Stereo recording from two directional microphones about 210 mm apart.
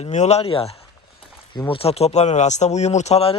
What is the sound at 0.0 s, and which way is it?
Speech, 30° left (ahead or behind).